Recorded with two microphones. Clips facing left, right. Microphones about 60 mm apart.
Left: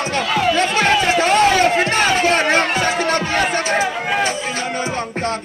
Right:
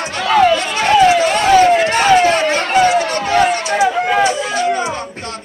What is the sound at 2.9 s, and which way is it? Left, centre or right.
Chatter, left.